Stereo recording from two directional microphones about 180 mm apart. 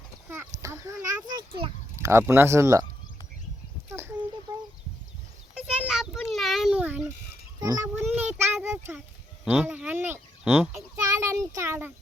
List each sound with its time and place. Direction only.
0.3 s a child's voice: 15° right (ahead or behind)
2.0 s a child's voice: 15° right (ahead or behind)
3.8 s a sound: 15° right (ahead or behind)
5.5 s a child's voice: 5° right (ahead or behind)
7.6 s a child's voice: 20° right (ahead or behind)